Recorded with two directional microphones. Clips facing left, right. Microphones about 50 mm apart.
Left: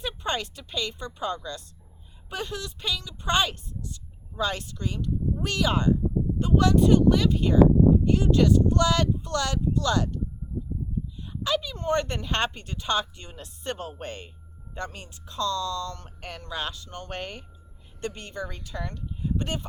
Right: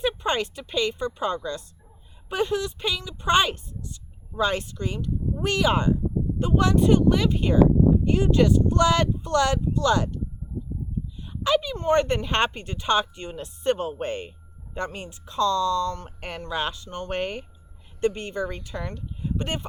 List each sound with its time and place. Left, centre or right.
0.0 s speech: right
11.2 s speech: right